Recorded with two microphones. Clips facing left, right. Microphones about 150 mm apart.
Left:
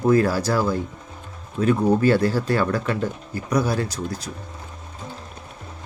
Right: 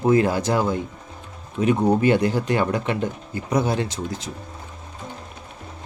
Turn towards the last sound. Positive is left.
turn(degrees=-20)  # may be behind; listen again after turning